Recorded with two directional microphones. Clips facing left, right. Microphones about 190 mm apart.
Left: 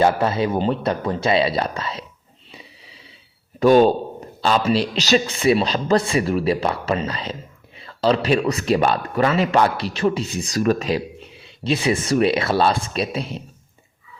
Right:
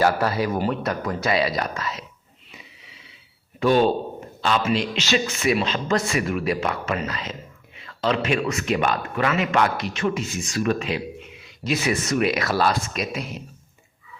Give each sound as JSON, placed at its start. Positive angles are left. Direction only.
{"t": 0.0, "sound": "speech", "side_deg": 25}
{"t": 2.5, "sound": "wheeze", "side_deg": 35}
{"t": 3.6, "sound": "speech", "side_deg": 40}